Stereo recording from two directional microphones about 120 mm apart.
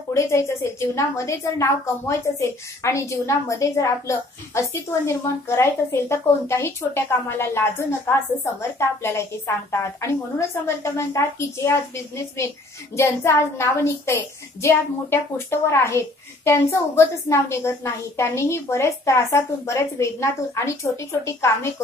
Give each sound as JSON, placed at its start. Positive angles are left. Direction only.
{"t": 0.1, "sound": "a woman's voice", "side_deg": 25}
{"t": 12.9, "sound": "a woman's voice", "side_deg": 20}